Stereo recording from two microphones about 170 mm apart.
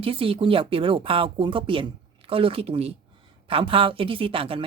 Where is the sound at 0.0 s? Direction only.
35° right (ahead or behind).